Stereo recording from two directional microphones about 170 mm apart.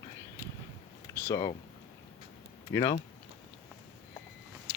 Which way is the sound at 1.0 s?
20° left (ahead or behind).